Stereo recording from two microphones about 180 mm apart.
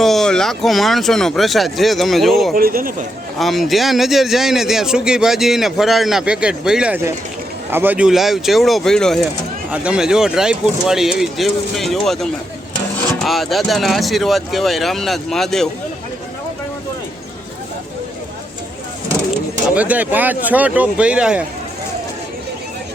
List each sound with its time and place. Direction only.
0.0 s a man's voice: centre (ahead or behind)
2.6 s speech: 55° right (ahead or behind)
3.3 s a man's voice: centre (ahead or behind)
19.7 s speech: 10° right (ahead or behind)